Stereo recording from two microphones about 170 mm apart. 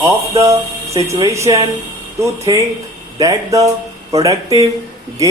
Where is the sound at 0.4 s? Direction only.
20° right (ahead or behind).